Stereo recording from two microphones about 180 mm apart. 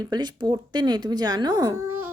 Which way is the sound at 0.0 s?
25° right (ahead or behind).